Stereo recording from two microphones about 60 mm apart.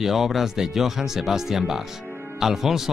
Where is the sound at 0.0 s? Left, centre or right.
Centre.